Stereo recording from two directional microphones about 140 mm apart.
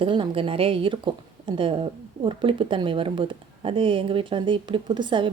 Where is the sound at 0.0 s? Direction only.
40° right (ahead or behind).